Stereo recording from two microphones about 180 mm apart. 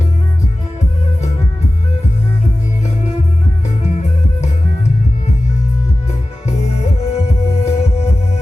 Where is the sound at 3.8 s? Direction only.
40° left (ahead or behind).